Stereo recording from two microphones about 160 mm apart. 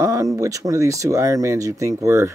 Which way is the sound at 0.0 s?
20° right (ahead or behind).